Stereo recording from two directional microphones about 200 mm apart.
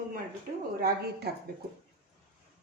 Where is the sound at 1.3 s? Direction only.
55° right (ahead or behind).